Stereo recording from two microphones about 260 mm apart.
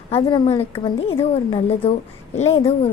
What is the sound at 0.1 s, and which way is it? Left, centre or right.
A woman's voice, centre.